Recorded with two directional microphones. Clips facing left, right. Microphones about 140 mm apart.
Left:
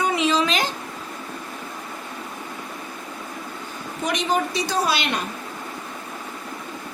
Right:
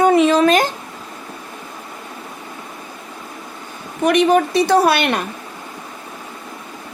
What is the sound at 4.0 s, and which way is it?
A woman's voice, 60° right (ahead or behind).